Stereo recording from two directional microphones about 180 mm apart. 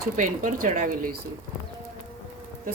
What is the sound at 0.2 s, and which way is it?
Speech, 45° right (ahead or behind).